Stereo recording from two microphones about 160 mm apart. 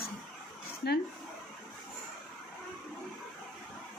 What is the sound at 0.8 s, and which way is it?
Speech, 90° left.